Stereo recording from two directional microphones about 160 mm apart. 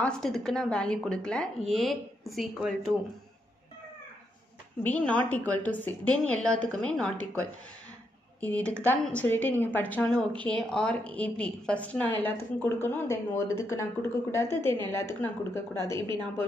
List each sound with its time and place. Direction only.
0.0 s a woman's voice: 5° left (ahead or behind)
4.8 s a woman's voice: 10° left (ahead or behind)
8.4 s a woman's voice: 10° left (ahead or behind)
16.0 s a woman's voice: 30° right (ahead or behind)